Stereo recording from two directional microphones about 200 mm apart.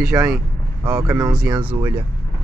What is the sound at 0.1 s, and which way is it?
Speech, 15° right (ahead or behind).